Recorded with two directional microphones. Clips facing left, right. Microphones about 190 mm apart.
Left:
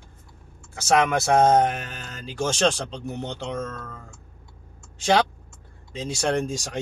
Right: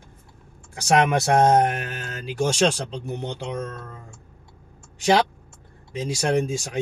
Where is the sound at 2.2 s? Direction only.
10° right (ahead or behind).